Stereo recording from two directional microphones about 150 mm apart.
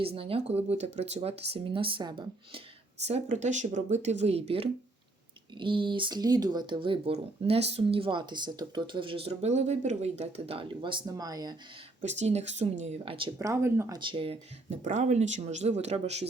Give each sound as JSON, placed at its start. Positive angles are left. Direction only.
{"t": 0.0, "sound": "speech", "side_deg": -40}
{"t": 3.0, "sound": "speech", "side_deg": -45}
{"t": 12.0, "sound": "speech", "side_deg": -50}
{"t": 13.4, "sound": "speech", "side_deg": -15}
{"t": 14.0, "sound": "speech", "side_deg": -35}
{"t": 14.8, "sound": "speech", "side_deg": -55}